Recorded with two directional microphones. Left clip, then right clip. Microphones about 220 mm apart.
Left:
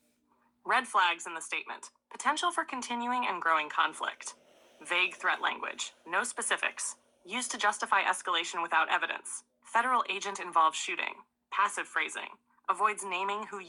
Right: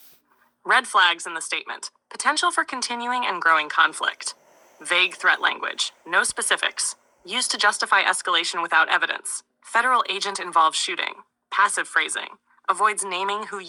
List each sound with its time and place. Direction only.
0.6 s speech: 35° right (ahead or behind)